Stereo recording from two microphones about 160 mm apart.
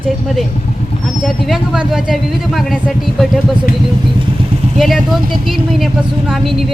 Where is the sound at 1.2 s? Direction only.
Centre (ahead or behind).